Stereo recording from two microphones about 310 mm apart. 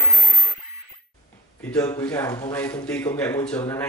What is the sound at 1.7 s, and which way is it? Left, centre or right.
A man's voice, centre.